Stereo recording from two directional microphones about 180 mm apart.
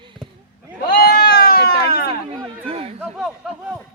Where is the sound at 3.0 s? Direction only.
5° right (ahead or behind).